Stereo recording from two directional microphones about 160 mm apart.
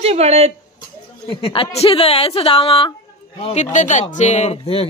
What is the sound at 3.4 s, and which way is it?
Speech, 45° left (ahead or behind).